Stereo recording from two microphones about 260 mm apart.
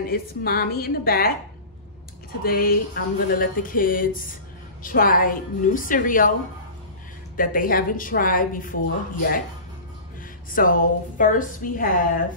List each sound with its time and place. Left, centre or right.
0.0 s speech: left
2.4 s speech: left
7.3 s speech: left
10.5 s speech: left